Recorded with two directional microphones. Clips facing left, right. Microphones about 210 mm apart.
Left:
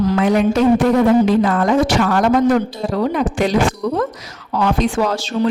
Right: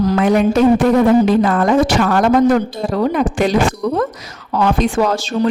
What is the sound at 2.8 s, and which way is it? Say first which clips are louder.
Speech: right 1 dB; 45° right (ahead or behind).